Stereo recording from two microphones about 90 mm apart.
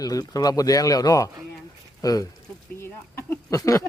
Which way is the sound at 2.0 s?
40° left (ahead or behind).